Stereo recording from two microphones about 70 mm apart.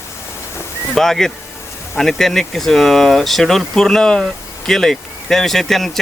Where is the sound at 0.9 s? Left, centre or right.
Centre.